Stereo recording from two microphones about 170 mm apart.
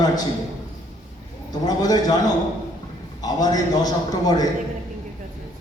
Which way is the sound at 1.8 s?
20° left (ahead or behind).